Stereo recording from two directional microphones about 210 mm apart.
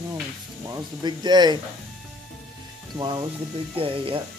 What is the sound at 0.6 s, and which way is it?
Speech, 15° right (ahead or behind).